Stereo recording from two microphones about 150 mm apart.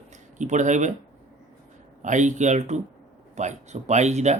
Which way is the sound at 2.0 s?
55° right (ahead or behind).